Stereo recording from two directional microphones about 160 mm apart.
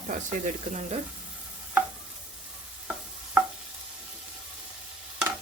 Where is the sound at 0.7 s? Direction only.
50° right (ahead or behind).